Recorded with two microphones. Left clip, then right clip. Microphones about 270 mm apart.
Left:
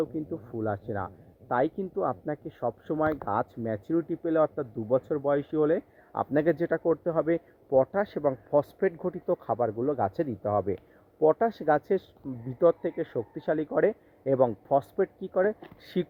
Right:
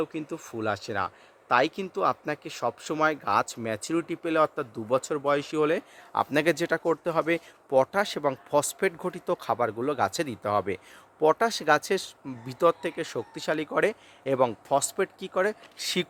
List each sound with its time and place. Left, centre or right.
0.5 s speech: centre
1.6 s speech: right
2.0 s speech: centre
2.3 s speech: right
3.0 s speech: centre